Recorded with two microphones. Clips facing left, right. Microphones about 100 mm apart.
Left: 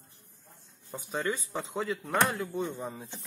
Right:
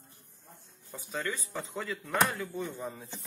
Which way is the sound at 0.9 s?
30° left (ahead or behind).